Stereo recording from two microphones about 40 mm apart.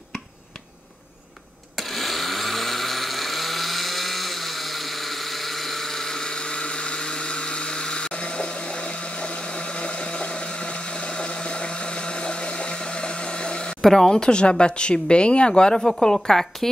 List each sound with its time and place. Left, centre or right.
1.8 s vehicle: centre; by 13.7 s left
13.7 s speech: centre
14.1 s speech: left
15.7 s a woman's voice: centre